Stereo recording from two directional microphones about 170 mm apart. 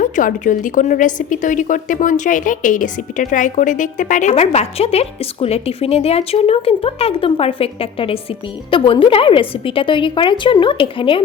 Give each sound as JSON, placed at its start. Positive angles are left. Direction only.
{"t": 0.0, "sound": "a woman's voice", "side_deg": 50}